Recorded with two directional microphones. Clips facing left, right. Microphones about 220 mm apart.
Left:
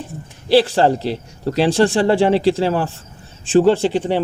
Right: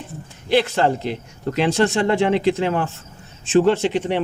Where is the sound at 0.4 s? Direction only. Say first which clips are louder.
Left 4 dB; 35° left (ahead or behind).